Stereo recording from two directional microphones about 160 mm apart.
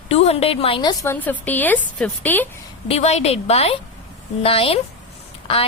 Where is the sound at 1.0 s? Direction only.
15° left (ahead or behind).